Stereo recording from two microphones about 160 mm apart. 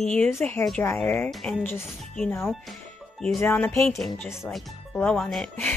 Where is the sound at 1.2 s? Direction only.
Centre (ahead or behind).